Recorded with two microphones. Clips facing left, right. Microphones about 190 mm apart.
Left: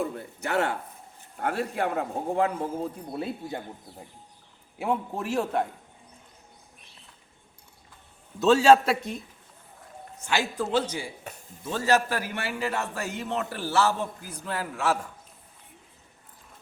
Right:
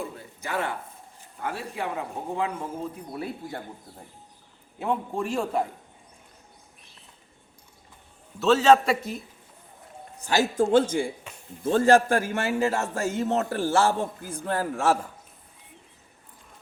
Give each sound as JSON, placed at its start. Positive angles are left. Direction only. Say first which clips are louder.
{"t": 0.0, "sound": "a man's voice", "louder": "left 4 dB", "side_deg": 65}
{"t": 4.8, "sound": "a man's voice", "louder": "right 1 dB", "side_deg": 5}
{"t": 8.4, "sound": "a man's voice", "louder": "even", "side_deg": 15}
{"t": 10.2, "sound": "a man's voice", "louder": "right 5 dB", "side_deg": -40}